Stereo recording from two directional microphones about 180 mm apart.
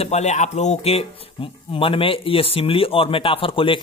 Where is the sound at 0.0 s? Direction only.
40° left (ahead or behind).